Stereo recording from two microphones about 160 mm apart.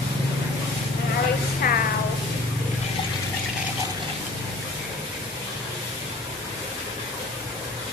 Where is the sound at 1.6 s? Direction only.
65° left (ahead or behind).